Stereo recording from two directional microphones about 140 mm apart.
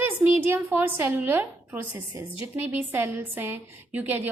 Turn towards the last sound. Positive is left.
turn(degrees=-10)  # may be behind; listen again after turning